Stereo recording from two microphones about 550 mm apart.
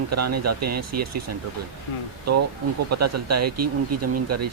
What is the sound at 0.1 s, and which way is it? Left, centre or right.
Speech, right.